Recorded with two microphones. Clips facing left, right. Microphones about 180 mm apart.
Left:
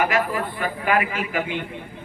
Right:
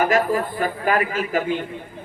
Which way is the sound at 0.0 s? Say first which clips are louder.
Right 3 dB; 40° right (ahead or behind).